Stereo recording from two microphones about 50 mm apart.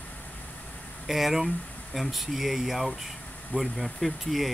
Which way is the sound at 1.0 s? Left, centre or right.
Centre.